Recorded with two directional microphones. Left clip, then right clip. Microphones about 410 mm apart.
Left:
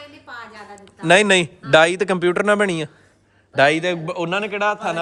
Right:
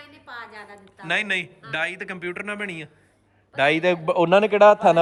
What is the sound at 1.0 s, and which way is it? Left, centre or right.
A man's voice, centre.